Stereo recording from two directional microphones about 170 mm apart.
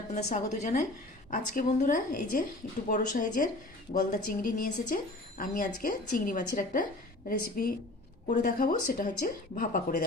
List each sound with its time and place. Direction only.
0.1 s a woman's voice: 45° left (ahead or behind)